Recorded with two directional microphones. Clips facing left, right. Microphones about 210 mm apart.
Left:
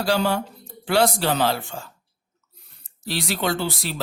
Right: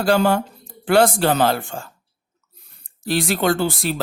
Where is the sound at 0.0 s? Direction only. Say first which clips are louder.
Right 5 dB; 50° right (ahead or behind).